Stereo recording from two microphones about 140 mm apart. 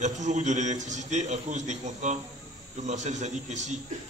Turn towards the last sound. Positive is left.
turn(degrees=-55)  # may be behind; listen again after turning